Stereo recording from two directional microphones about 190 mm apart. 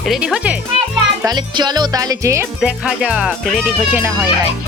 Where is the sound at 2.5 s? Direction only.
5° right (ahead or behind).